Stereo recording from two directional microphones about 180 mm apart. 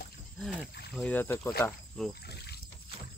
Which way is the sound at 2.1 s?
65° left (ahead or behind).